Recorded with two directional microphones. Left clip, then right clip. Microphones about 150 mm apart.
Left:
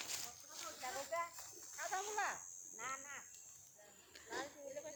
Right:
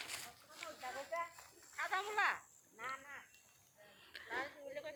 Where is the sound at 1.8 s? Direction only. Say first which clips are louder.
Right 5 dB; 45° left (ahead or behind).